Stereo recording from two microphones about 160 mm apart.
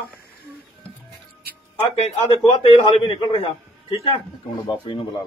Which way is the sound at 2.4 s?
30° left (ahead or behind).